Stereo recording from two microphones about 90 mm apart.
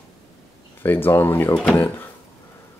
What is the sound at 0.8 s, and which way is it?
Speech, 20° left (ahead or behind).